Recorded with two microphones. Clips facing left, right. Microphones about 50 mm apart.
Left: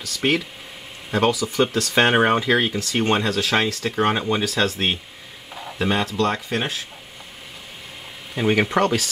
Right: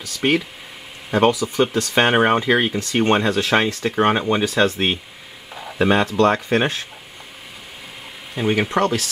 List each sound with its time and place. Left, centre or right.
0.0 s speech: centre
6.0 s speech: right
8.4 s speech: centre